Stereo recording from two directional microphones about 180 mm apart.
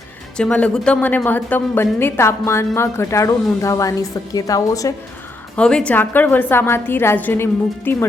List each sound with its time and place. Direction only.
0.3 s a woman's voice: 5° left (ahead or behind)
5.5 s speech: 5° left (ahead or behind)